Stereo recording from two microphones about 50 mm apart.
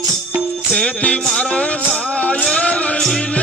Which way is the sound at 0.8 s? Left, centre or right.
Left.